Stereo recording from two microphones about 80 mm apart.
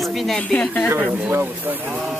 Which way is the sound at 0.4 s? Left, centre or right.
Centre.